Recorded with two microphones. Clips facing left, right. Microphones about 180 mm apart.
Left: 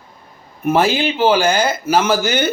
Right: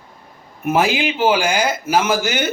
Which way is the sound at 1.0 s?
35° left (ahead or behind).